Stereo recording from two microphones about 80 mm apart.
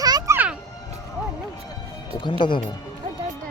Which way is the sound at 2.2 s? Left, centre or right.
Left.